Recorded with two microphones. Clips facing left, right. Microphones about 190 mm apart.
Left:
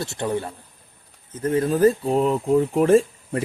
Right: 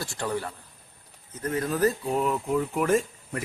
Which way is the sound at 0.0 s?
25° left (ahead or behind).